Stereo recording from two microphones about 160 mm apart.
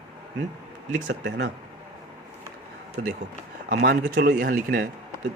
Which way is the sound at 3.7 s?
90° right.